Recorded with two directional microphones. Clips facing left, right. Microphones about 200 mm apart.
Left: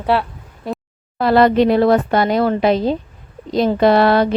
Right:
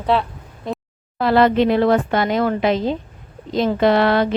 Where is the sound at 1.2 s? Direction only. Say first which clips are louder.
Left 2 dB; 40° left (ahead or behind).